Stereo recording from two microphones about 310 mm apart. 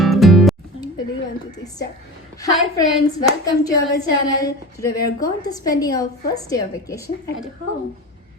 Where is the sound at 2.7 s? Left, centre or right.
Centre.